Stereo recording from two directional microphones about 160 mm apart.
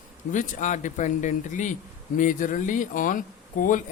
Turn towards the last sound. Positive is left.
turn(degrees=55)  # may be behind; listen again after turning